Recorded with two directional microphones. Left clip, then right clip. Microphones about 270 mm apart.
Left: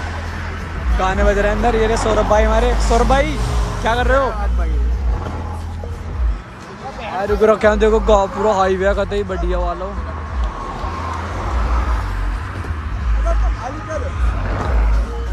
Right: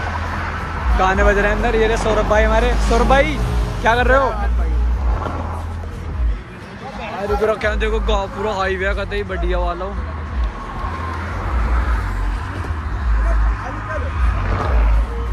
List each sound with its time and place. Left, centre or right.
1.0 s speech: centre
7.4 s speech: left
14.4 s a sound: right